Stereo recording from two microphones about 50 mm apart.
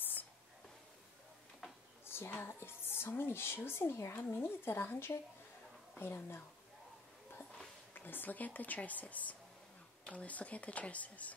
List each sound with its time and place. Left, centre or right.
2.0 s a sound: left
2.4 s speech: left
7.9 s speech: left